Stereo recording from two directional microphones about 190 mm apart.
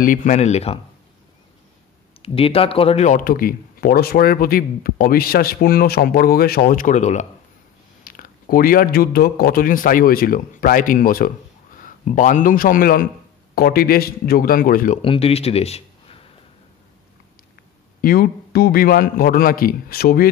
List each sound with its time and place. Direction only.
0.0 s speech: 40° left (ahead or behind)
2.2 s a man's voice: 30° left (ahead or behind)
8.0 s a man's voice: 50° left (ahead or behind)
15.0 s speech: 30° left (ahead or behind)
18.0 s a man's voice: 55° left (ahead or behind)